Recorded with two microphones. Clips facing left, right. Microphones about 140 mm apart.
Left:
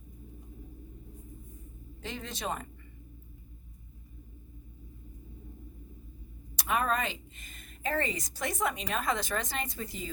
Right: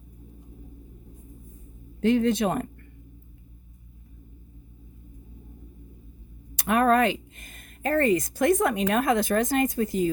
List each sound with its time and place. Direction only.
2.0 s speech: 60° right (ahead or behind)
6.6 s speech: 60° right (ahead or behind)